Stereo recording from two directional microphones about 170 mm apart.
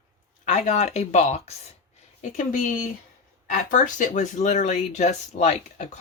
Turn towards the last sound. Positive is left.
turn(degrees=45)  # may be behind; listen again after turning